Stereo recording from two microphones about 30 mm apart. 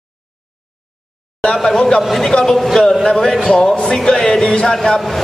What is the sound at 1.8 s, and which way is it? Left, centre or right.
Speech, left.